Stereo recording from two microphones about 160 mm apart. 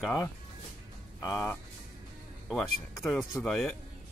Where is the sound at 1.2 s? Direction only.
20° left (ahead or behind).